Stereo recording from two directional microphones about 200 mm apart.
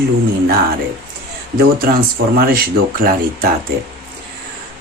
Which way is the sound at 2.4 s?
50° right (ahead or behind).